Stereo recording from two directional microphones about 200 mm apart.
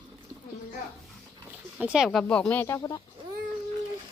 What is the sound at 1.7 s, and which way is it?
Speech, 5° right (ahead or behind).